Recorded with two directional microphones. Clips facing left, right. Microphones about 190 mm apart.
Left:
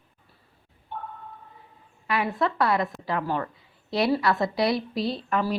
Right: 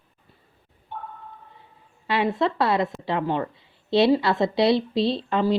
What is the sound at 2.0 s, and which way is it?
A woman's voice, 25° right (ahead or behind).